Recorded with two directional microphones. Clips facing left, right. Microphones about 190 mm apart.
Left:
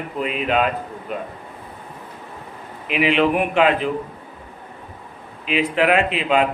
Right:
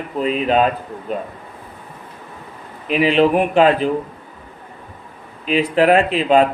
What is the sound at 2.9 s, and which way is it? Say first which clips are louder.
Speech: right 4 dB; 35° right (ahead or behind).